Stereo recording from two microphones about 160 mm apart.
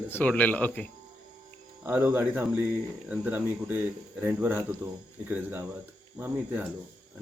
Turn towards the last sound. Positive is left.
turn(degrees=-15)  # may be behind; listen again after turning